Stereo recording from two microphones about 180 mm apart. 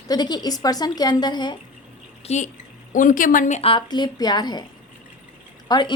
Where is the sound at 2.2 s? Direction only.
40° left (ahead or behind); by 4.6 s 25° left (ahead or behind).